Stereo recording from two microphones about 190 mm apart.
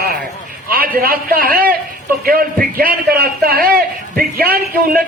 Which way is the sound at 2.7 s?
55° right (ahead or behind).